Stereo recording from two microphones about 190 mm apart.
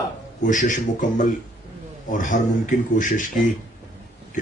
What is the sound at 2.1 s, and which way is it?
Speech, 40° left (ahead or behind).